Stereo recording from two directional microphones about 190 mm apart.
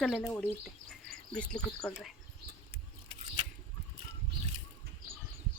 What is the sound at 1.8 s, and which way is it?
Speech, 5° left (ahead or behind).